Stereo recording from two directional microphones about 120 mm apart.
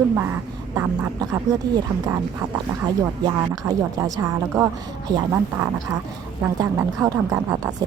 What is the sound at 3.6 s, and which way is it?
Speech, 40° right (ahead or behind).